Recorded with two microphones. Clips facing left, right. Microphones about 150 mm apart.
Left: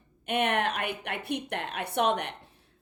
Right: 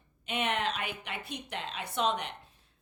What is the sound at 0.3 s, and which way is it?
A woman's voice, 55° left (ahead or behind).